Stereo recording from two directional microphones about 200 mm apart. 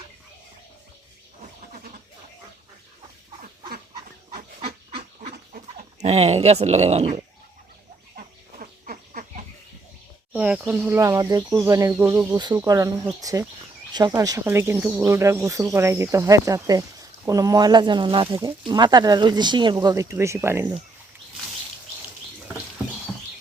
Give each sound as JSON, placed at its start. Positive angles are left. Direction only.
{"t": 4.3, "sound": "fowl", "side_deg": -30}
{"t": 8.1, "sound": "a sound", "side_deg": -40}
{"t": 10.3, "sound": "speech", "side_deg": -5}